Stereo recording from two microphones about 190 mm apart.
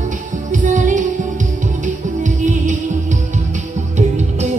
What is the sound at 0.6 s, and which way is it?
Music, 40° right (ahead or behind).